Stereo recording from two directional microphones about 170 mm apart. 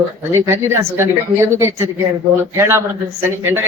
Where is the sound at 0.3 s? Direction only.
15° right (ahead or behind).